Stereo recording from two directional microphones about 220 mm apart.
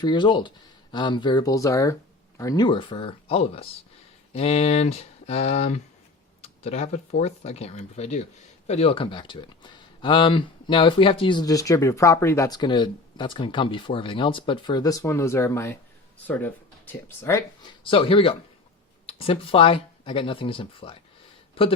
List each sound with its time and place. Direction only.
0.0 s speech: 20° left (ahead or behind)
17.8 s speech: 25° left (ahead or behind)